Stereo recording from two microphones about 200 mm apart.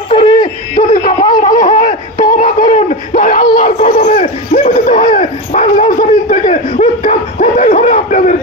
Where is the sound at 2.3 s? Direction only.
40° left (ahead or behind).